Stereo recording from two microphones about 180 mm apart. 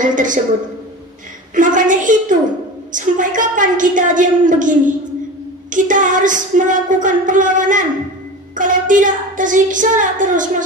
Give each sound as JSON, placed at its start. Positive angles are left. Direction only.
{"t": 0.0, "sound": "speech", "side_deg": -45}
{"t": 1.5, "sound": "speech", "side_deg": -45}